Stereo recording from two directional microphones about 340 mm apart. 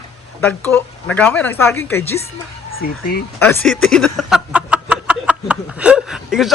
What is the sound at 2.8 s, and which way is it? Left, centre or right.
Speech, left.